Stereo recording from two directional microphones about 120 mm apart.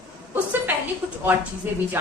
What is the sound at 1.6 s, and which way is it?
Speech, 15° right (ahead or behind).